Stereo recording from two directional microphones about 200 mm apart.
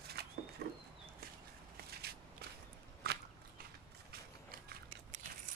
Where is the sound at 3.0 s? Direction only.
50° right (ahead or behind).